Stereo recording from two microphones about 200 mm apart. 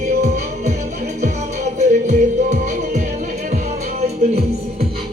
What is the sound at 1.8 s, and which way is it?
Music, 35° right (ahead or behind).